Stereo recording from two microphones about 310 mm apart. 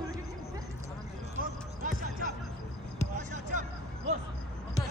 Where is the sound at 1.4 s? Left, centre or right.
Right.